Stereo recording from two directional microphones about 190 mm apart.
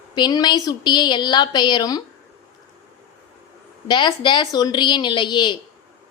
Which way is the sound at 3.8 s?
25° left (ahead or behind).